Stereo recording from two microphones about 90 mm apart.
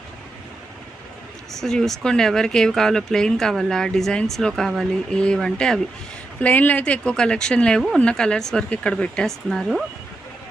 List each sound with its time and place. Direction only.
1.5 s speech: 5° left (ahead or behind)
6.4 s speech: 15° left (ahead or behind); by 9.8 s centre (ahead or behind)